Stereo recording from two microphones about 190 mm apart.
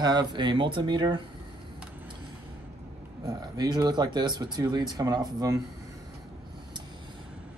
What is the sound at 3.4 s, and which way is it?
Speech, 20° right (ahead or behind).